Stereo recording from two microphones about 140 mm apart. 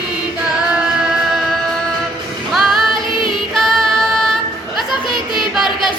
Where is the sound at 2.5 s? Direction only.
Centre (ahead or behind).